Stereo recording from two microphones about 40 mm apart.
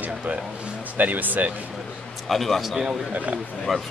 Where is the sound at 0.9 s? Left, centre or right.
Right.